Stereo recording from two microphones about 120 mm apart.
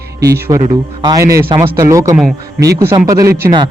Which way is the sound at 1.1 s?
25° right (ahead or behind).